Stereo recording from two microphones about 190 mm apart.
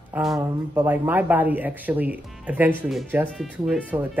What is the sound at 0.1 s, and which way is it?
Speech, centre (ahead or behind).